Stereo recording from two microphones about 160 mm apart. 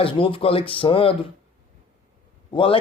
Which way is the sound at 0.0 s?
35° left (ahead or behind).